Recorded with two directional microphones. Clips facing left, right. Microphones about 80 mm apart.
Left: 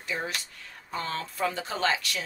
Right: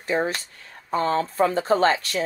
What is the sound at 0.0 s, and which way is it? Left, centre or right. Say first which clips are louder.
Speech: right 9 dB; right.